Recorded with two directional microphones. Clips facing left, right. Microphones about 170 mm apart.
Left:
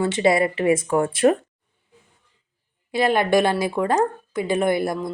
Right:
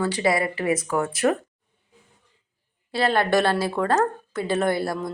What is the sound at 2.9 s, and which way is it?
A woman's voice, 15° left (ahead or behind).